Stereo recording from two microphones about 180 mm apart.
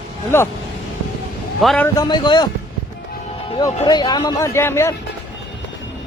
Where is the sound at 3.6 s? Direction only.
25° left (ahead or behind).